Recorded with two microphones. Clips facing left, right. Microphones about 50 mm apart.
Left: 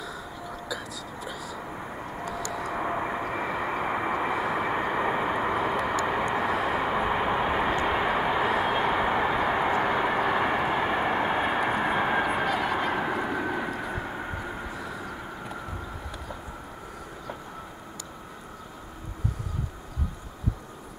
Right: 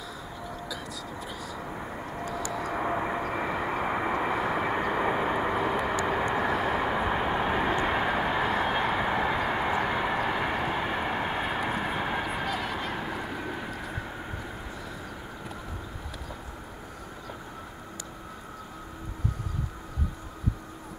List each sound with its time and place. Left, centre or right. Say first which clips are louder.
0.0 s vehicle: left 2 dB; centre
12.7 s a sound: left 6 dB; centre
13.2 s vehicle: left 6 dB; centre